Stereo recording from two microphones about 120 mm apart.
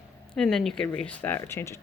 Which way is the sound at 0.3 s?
5° left (ahead or behind).